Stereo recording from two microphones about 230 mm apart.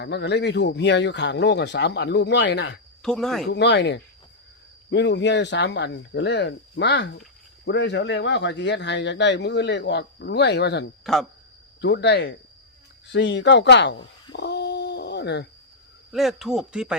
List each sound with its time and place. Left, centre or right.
0.0 s speech: left
3.0 s speech: centre
3.4 s speech: left
11.0 s speech: centre
11.8 s speech: left
14.3 s a sound: left
16.1 s speech: centre